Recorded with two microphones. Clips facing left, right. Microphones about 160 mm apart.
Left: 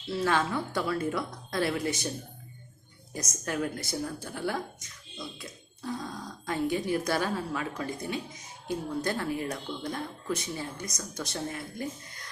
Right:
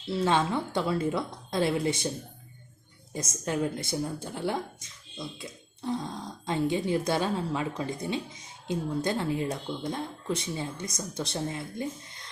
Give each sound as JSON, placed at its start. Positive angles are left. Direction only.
{"t": 0.1, "sound": "speech", "side_deg": -25}
{"t": 3.2, "sound": "speech", "side_deg": -25}